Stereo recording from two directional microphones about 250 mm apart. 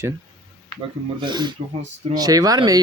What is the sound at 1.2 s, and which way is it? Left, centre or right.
Speech, centre.